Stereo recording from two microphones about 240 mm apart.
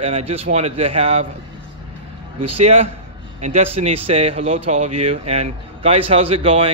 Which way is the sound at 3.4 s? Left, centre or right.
Right.